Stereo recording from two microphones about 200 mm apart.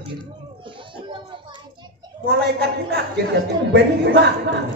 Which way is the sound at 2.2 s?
55° right (ahead or behind).